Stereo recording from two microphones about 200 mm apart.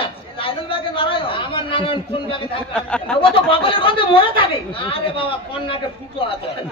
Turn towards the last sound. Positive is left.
turn(degrees=25)  # may be behind; listen again after turning